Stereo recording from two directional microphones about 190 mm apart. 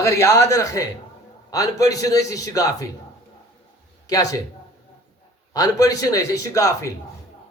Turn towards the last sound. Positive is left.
turn(degrees=15)  # may be behind; listen again after turning